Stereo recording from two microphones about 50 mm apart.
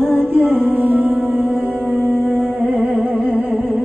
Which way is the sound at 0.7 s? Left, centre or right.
Right.